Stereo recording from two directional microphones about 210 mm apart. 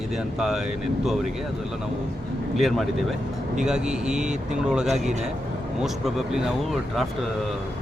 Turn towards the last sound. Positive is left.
turn(degrees=0)  # may be behind; listen again after turning